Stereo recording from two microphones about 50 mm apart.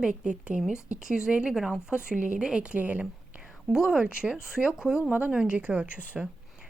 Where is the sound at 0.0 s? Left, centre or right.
Centre.